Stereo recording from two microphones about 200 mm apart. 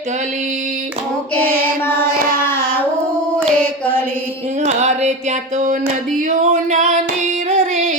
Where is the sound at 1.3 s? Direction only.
10° left (ahead or behind).